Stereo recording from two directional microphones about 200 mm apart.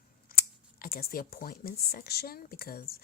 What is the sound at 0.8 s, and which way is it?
Speech, 50° left (ahead or behind).